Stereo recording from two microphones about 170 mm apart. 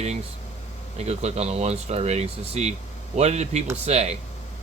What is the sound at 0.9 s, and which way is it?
Speech, 40° right (ahead or behind).